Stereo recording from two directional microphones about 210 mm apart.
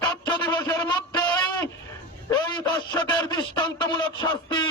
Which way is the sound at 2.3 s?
20° left (ahead or behind).